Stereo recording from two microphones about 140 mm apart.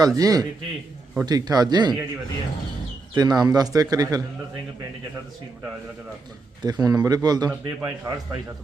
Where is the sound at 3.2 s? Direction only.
30° right (ahead or behind).